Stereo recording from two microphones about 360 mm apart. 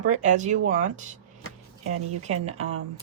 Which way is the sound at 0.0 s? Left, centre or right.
Centre.